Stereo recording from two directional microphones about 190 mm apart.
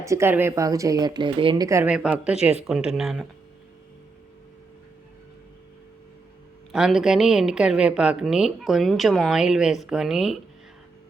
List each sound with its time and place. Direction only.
0.0 s speech: 15° right (ahead or behind)
1.9 s a woman's voice: 5° right (ahead or behind)
6.7 s a woman's voice: 5° right (ahead or behind)